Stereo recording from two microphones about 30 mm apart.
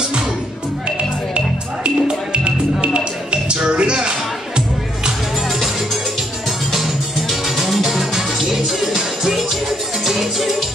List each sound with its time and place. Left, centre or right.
1.3 s music: right
6.7 s music: centre